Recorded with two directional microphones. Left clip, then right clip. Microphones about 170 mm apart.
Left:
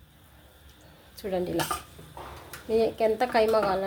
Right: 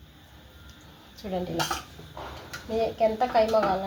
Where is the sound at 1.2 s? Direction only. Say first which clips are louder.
Left 2 dB; 40° left (ahead or behind).